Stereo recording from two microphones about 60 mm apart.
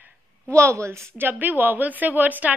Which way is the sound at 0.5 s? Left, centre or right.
Right.